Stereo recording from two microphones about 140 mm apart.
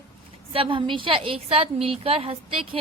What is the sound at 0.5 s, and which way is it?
A woman's voice, 40° right (ahead or behind).